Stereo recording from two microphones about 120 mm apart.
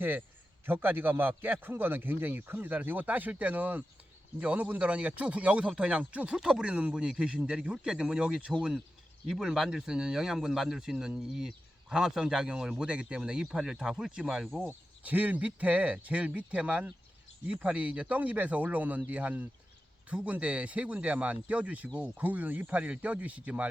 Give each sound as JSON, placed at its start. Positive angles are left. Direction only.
{"t": 0.6, "sound": "speech", "side_deg": -15}